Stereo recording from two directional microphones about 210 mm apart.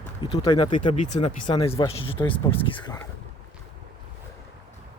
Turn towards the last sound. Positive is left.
turn(degrees=20)  # may be behind; listen again after turning